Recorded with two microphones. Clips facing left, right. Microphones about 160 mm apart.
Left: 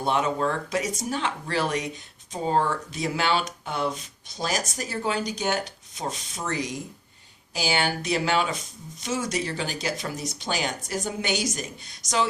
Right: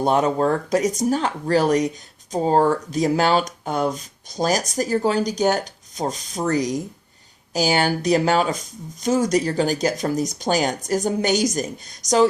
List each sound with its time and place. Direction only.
0.0 s speech: 40° right (ahead or behind)